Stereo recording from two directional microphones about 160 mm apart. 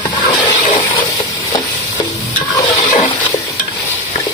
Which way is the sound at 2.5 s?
25° left (ahead or behind).